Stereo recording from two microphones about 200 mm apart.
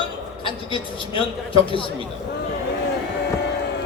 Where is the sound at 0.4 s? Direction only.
25° left (ahead or behind).